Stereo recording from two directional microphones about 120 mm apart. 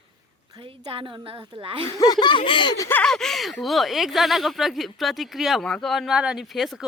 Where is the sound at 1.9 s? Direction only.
30° left (ahead or behind).